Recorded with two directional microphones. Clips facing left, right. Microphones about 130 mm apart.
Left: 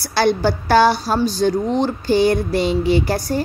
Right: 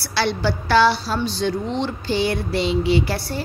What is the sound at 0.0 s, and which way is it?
A woman's voice, 45° left (ahead or behind).